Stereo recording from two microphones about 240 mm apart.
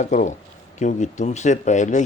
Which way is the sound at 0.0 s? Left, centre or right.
Left.